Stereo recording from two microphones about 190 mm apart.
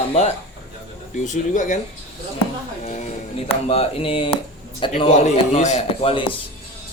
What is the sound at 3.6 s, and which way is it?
A man's voice, 30° left (ahead or behind).